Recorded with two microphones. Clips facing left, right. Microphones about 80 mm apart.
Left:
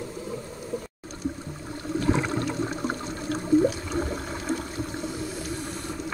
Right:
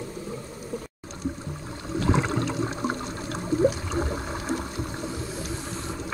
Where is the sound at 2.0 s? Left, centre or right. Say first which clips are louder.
Right 1 dB; right.